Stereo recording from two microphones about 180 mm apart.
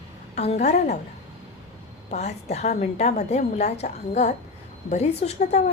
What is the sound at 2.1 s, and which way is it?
A woman's voice, 40° left (ahead or behind).